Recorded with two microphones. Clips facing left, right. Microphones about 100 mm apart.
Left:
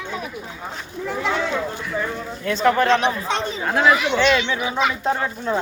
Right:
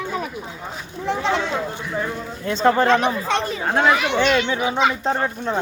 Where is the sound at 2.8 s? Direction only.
50° right (ahead or behind); by 5.2 s 30° right (ahead or behind).